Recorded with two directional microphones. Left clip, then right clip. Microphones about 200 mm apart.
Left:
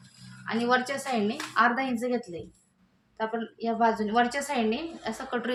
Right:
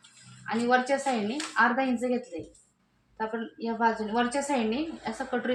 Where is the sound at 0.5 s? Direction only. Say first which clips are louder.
Right 1 dB; 40° left (ahead or behind).